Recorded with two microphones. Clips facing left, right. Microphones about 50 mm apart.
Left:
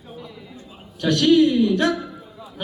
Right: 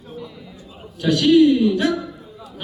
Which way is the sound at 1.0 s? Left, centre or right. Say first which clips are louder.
Right 2 dB; centre.